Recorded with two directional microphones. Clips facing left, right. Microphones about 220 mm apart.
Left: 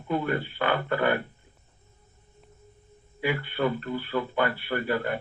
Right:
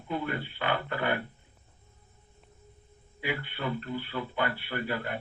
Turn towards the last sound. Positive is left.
turn(degrees=45)  # may be behind; listen again after turning